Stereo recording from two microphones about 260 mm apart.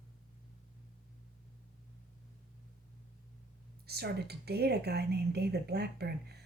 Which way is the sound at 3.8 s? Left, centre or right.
Right.